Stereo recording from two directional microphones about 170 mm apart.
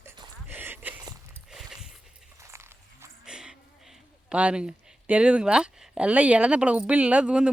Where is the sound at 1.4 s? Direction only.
5° right (ahead or behind).